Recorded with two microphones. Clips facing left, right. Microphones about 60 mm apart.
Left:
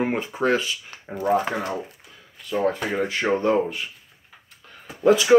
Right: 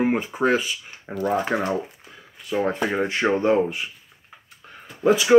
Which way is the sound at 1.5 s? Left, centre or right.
Right.